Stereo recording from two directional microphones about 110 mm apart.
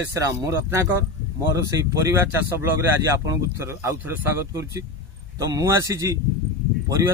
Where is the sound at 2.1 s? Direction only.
20° right (ahead or behind).